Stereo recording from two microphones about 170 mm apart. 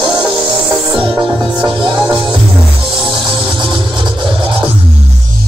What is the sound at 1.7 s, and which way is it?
Music, 30° right (ahead or behind).